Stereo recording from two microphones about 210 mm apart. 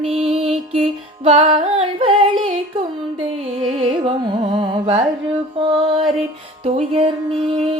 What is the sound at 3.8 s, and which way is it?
Female singing, 25° right (ahead or behind).